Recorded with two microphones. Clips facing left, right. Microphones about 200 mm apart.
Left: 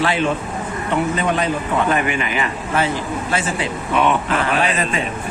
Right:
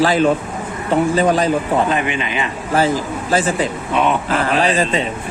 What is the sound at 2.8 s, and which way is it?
Speech, 40° right (ahead or behind).